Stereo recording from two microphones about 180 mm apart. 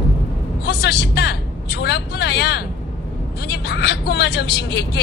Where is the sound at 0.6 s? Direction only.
65° left (ahead or behind).